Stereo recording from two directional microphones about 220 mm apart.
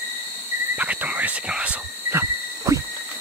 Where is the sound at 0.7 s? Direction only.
5° right (ahead or behind).